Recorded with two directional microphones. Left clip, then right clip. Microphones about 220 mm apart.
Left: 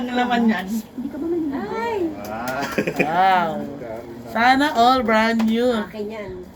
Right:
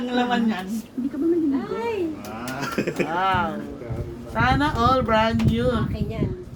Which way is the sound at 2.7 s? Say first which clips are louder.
Left 3 dB; 20° left (ahead or behind).